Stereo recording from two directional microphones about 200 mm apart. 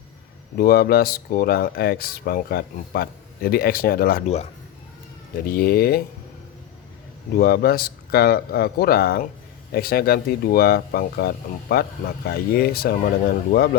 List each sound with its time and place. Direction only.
0.5 s speech: 50° left (ahead or behind)
5.5 s speech: 50° left (ahead or behind)
7.3 s speech: 50° left (ahead or behind)